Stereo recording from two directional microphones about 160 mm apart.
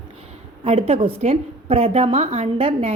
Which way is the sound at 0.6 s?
40° right (ahead or behind).